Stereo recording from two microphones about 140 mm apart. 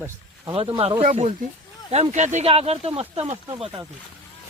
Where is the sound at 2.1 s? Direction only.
55° right (ahead or behind).